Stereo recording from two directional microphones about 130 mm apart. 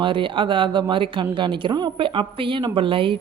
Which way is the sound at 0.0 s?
40° right (ahead or behind).